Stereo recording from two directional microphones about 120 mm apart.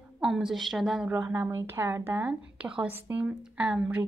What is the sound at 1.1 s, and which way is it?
A woman's voice, 20° right (ahead or behind).